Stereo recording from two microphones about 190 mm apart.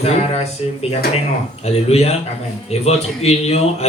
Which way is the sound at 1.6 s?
35° left (ahead or behind).